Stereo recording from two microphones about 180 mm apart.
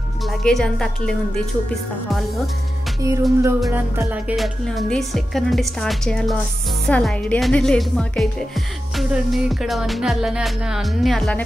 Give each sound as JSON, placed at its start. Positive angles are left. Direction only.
{"t": 0.3, "sound": "music", "side_deg": 0}
{"t": 3.0, "sound": "music", "side_deg": -20}
{"t": 4.6, "sound": "music", "side_deg": 0}